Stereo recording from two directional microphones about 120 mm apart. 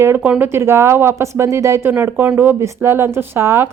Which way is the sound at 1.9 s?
15° right (ahead or behind).